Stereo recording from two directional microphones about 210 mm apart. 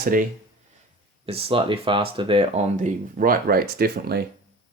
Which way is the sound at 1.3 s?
25° right (ahead or behind).